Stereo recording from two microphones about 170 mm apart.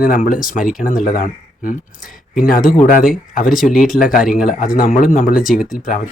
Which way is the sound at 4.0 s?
55° left (ahead or behind).